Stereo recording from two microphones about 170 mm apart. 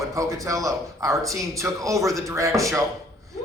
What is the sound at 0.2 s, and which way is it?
A man's voice, 20° right (ahead or behind).